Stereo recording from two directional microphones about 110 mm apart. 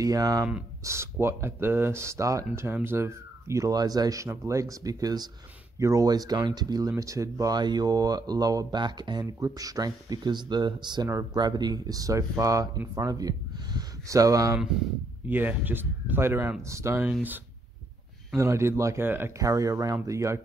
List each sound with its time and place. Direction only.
0.0 s speech: 35° right (ahead or behind)
15.2 s speech: 15° right (ahead or behind)
18.3 s speech: 25° right (ahead or behind)